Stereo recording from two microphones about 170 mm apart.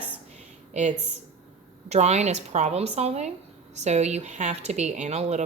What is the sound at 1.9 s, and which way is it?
Speech, 40° right (ahead or behind).